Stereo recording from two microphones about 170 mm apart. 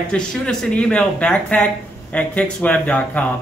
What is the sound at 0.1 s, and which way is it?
Speech, 5° left (ahead or behind).